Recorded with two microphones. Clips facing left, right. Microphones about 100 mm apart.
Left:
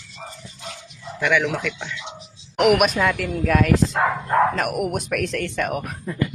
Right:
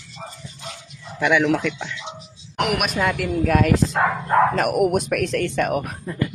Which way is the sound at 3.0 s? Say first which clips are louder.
Right 1 dB; 10° right (ahead or behind).